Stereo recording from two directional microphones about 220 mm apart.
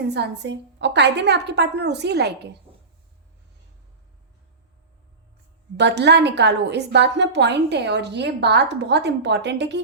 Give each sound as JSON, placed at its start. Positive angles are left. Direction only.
{"t": 0.1, "sound": "a woman's voice", "side_deg": -50}
{"t": 5.7, "sound": "a woman's voice", "side_deg": -50}